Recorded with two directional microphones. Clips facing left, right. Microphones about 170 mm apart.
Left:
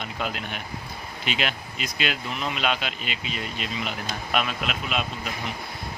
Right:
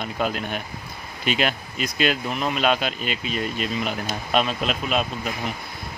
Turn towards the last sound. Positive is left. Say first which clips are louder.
# right 5 dB
turn(degrees=-40)  # may be behind; listen again after turning